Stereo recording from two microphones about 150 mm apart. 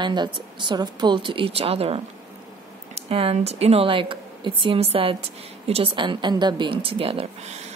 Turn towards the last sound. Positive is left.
turn(degrees=-40)  # may be behind; listen again after turning